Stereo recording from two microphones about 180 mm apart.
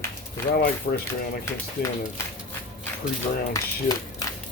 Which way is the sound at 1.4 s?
15° left (ahead or behind).